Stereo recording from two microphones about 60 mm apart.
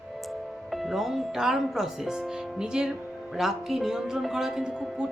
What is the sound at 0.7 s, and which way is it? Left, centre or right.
Speech, centre.